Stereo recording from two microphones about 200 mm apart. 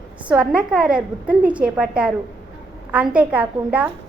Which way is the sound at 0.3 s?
5° right (ahead or behind).